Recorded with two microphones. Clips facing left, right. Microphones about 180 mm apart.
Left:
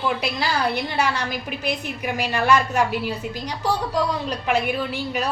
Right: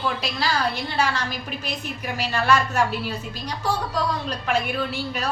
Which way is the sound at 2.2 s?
15° left (ahead or behind).